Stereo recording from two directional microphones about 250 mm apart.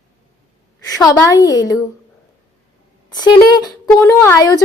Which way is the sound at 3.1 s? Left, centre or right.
Centre.